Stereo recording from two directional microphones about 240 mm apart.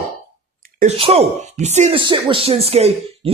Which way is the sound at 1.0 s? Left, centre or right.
Right.